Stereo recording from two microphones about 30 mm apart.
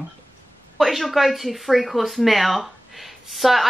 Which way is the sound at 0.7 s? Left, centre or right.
Centre.